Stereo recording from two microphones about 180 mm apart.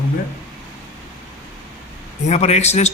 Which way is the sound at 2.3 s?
40° left (ahead or behind).